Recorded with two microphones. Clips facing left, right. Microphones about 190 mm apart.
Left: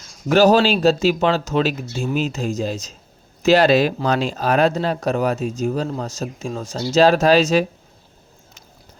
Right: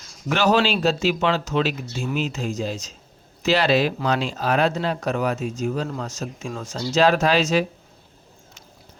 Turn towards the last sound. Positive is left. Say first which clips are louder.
# left 5 dB
turn(degrees=40)  # may be behind; listen again after turning